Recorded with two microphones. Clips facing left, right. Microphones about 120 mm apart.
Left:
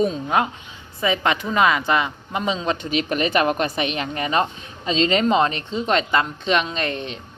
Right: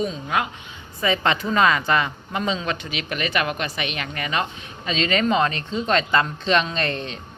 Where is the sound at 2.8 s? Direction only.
35° left (ahead or behind); by 7.2 s 15° left (ahead or behind).